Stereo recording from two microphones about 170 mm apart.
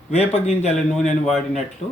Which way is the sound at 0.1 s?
40° left (ahead or behind).